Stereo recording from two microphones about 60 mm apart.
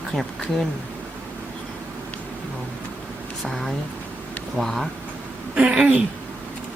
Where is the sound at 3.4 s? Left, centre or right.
Centre.